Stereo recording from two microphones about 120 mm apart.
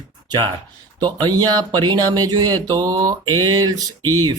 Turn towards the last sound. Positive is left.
turn(degrees=-35)  # may be behind; listen again after turning